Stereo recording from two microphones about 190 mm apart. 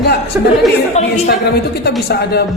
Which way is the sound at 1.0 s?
35° left (ahead or behind).